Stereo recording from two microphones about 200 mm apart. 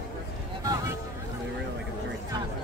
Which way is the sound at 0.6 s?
15° right (ahead or behind).